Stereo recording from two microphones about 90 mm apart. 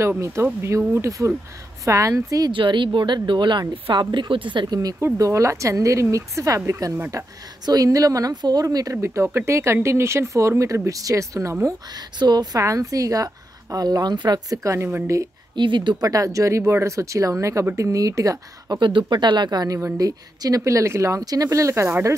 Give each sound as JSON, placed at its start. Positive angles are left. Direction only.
{"t": 0.2, "sound": "a woman's voice", "side_deg": -30}
{"t": 2.5, "sound": "speech", "side_deg": -65}
{"t": 5.0, "sound": "a woman's voice", "side_deg": -30}
{"t": 8.9, "sound": "a woman's voice", "side_deg": -30}
{"t": 11.6, "sound": "speech", "side_deg": -50}
{"t": 12.5, "sound": "a woman's voice", "side_deg": -40}
{"t": 15.5, "sound": "speech", "side_deg": -60}
{"t": 16.0, "sound": "a woman's voice", "side_deg": -40}
{"t": 18.8, "sound": "a woman's voice", "side_deg": -65}
{"t": 21.2, "sound": "a woman's voice", "side_deg": -45}